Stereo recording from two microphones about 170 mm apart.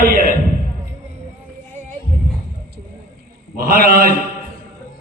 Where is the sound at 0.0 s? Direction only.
60° right (ahead or behind).